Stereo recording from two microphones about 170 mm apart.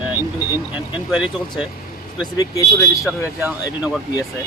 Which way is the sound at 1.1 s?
5° right (ahead or behind).